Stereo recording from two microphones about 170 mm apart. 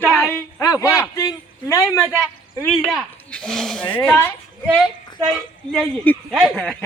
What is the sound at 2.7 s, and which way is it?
A man's voice, centre (ahead or behind).